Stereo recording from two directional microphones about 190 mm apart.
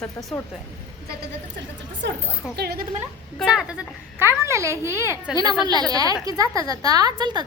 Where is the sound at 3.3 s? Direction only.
5° right (ahead or behind).